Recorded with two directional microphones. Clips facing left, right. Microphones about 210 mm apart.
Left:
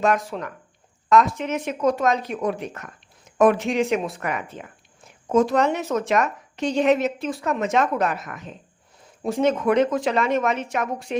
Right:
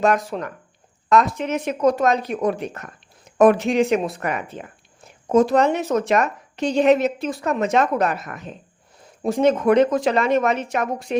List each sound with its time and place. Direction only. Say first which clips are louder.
0.0 s a woman's voice: right 2 dB; 35° right (ahead or behind)